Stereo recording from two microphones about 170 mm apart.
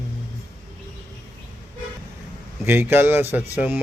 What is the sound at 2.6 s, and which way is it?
Mantra, 10° right (ahead or behind).